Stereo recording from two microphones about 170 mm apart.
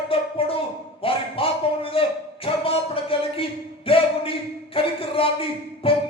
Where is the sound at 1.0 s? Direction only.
35° left (ahead or behind).